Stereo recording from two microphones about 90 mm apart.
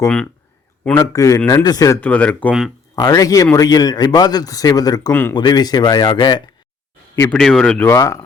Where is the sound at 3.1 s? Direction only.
40° left (ahead or behind); by 6.4 s 60° left (ahead or behind).